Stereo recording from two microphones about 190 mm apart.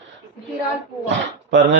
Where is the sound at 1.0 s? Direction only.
70° right (ahead or behind).